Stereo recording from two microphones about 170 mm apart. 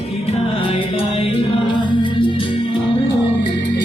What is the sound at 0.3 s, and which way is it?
Music, 35° left (ahead or behind).